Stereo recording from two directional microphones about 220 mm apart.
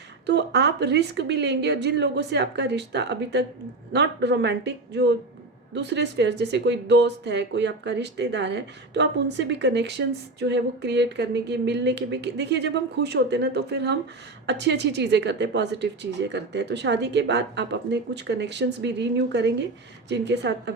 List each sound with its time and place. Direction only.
0.3 s a woman's voice: 50° right (ahead or behind)